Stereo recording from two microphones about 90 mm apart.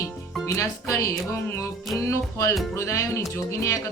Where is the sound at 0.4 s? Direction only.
35° left (ahead or behind).